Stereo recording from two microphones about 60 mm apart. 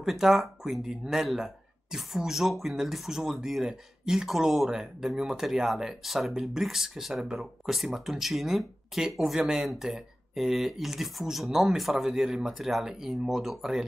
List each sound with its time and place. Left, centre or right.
0.0 s speech: centre